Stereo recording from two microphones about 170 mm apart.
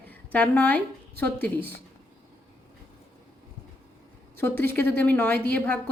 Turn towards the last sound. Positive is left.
turn(degrees=10)  # may be behind; listen again after turning